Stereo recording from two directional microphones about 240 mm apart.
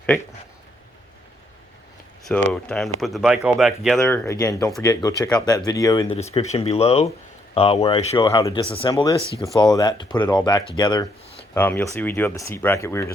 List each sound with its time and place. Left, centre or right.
2.5 s speech: centre
6.3 s speech: left
11.5 s speech: centre